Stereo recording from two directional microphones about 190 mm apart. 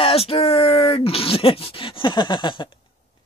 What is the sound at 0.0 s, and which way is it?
Speech, 30° left (ahead or behind).